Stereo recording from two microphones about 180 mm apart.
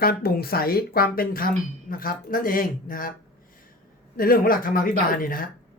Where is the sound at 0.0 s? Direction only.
60° left (ahead or behind).